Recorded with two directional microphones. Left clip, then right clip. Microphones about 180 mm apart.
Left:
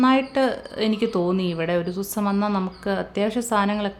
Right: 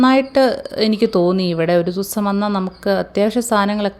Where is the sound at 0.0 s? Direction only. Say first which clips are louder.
Right 6 dB; 30° right (ahead or behind).